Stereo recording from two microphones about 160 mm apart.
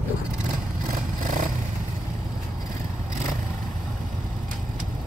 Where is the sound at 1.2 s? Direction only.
55° right (ahead or behind).